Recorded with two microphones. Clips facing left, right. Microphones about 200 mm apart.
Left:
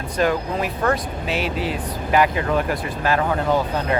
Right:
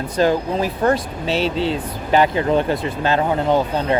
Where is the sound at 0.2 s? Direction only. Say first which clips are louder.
Right 3 dB; 30° right (ahead or behind).